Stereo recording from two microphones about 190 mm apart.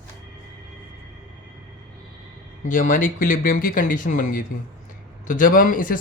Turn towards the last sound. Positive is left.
turn(degrees=45)  # may be behind; listen again after turning